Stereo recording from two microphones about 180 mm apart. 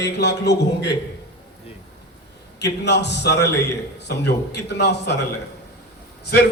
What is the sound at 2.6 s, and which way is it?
A man's voice, 70° left (ahead or behind).